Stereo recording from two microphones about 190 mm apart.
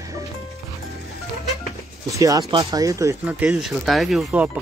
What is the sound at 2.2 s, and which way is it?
Speech, 20° right (ahead or behind).